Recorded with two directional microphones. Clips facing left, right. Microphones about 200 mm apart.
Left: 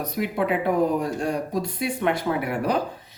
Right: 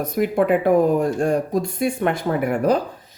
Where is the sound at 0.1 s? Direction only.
50° right (ahead or behind).